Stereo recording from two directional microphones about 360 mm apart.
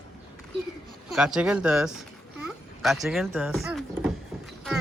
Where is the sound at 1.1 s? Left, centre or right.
Centre.